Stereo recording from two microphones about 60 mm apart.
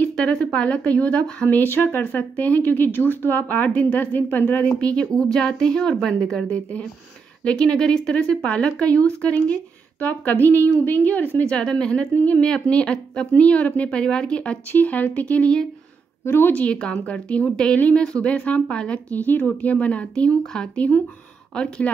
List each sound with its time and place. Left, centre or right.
0.0 s a woman's voice: centre
11.4 s a woman's voice: centre
16.3 s a woman's voice: left
16.5 s speech: centre